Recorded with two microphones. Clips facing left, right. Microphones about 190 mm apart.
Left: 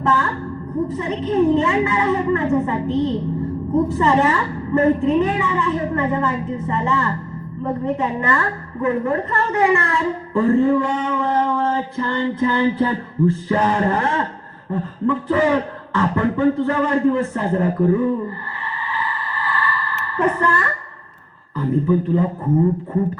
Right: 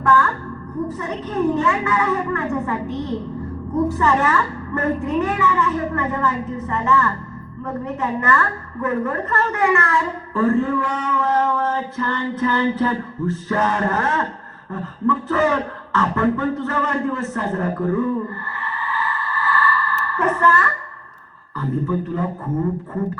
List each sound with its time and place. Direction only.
0.0 s music: 20° left (ahead or behind)
0.9 s a woman's voice: 20° left (ahead or behind)
3.8 s a woman's voice: 20° left (ahead or behind)
18.6 s a sound: 15° left (ahead or behind)
20.1 s a woman's voice: 15° left (ahead or behind)